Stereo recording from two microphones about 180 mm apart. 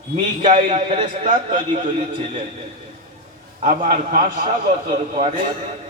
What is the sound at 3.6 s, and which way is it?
A man's voice, 45° right (ahead or behind).